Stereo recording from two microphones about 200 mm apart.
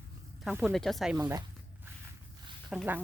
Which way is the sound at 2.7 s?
5° right (ahead or behind).